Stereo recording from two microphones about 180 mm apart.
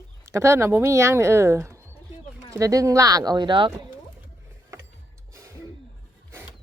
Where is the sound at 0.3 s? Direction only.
15° right (ahead or behind).